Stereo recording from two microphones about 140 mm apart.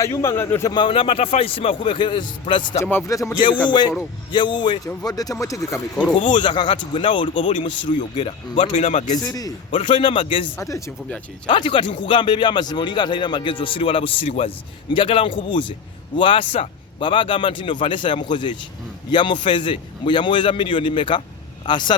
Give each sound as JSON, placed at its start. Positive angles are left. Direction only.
{"t": 0.0, "sound": "speech", "side_deg": 20}
{"t": 0.7, "sound": "speech", "side_deg": 35}
{"t": 2.8, "sound": "speech", "side_deg": 20}
{"t": 6.1, "sound": "speech", "side_deg": 35}
{"t": 8.9, "sound": "speech", "side_deg": 50}
{"t": 9.7, "sound": "speech", "side_deg": 35}
{"t": 10.6, "sound": "speech", "side_deg": 25}
{"t": 11.4, "sound": "speech", "side_deg": 35}